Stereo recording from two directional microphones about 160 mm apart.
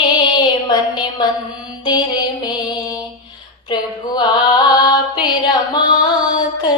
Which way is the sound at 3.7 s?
25° left (ahead or behind).